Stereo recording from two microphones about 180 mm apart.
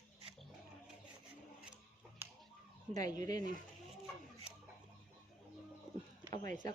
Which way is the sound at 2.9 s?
20° left (ahead or behind).